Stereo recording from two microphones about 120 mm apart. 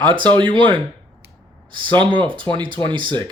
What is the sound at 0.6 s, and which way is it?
Speech, 45° right (ahead or behind).